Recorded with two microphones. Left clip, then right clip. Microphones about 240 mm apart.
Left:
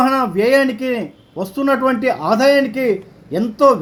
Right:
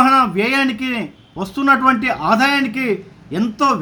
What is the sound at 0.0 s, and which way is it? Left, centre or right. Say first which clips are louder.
A man's voice: right 2 dB; centre.